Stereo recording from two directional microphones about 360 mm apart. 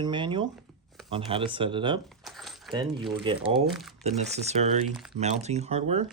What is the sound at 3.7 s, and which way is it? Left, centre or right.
Speech, centre.